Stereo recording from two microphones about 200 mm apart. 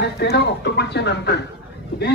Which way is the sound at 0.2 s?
55° left (ahead or behind).